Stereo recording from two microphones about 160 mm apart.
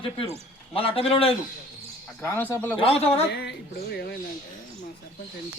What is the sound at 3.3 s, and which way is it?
Speech, 90° left.